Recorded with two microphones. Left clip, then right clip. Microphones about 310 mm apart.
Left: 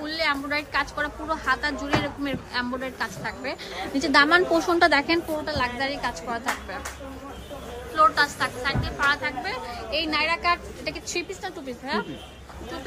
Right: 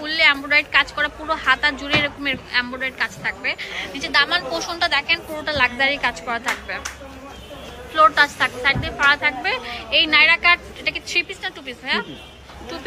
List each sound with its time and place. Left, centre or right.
0.0 s a woman's voice: centre
4.1 s a woman's voice: left
5.4 s a woman's voice: centre
7.9 s a woman's voice: centre